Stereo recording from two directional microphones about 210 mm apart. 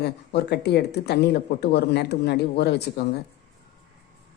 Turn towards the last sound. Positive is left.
turn(degrees=50)  # may be behind; listen again after turning